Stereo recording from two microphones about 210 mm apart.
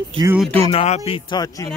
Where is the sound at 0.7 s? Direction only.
30° left (ahead or behind).